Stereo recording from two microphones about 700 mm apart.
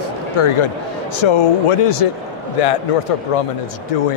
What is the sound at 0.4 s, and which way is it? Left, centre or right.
Speech, left.